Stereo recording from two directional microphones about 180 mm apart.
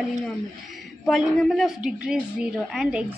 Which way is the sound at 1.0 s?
Centre (ahead or behind).